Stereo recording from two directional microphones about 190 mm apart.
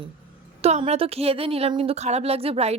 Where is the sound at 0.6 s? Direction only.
35° right (ahead or behind).